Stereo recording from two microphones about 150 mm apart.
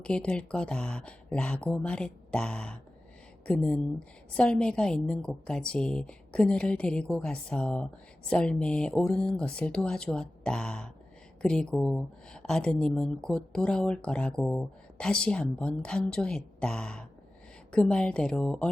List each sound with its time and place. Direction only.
0.0 s a woman's voice: 5° left (ahead or behind)